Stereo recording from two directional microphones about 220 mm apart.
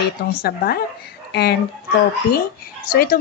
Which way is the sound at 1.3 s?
45° left (ahead or behind).